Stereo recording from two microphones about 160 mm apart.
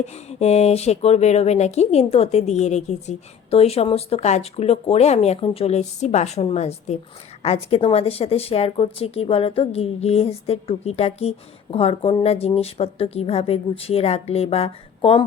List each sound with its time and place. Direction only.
0.0 s speech: 45° left (ahead or behind)